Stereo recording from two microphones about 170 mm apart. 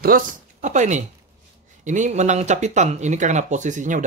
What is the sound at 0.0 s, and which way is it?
Speech, 50° right (ahead or behind).